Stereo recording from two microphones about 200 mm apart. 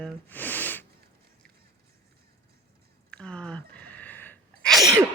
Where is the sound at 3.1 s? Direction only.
5° left (ahead or behind).